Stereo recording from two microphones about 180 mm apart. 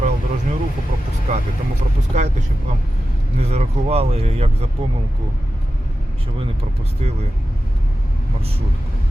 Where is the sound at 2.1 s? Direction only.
40° right (ahead or behind).